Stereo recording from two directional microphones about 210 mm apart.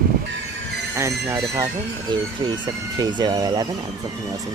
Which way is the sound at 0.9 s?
15° right (ahead or behind).